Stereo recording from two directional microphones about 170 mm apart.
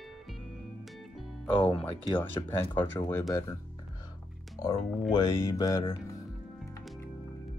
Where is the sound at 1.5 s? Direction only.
30° left (ahead or behind).